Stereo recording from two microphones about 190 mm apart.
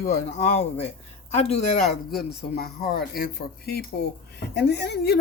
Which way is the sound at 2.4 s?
55° left (ahead or behind).